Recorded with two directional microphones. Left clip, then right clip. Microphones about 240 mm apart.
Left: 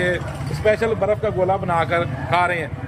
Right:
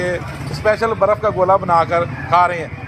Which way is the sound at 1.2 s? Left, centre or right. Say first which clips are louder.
Right 6 dB; centre.